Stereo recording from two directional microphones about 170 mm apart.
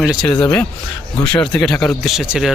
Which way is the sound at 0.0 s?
Centre (ahead or behind).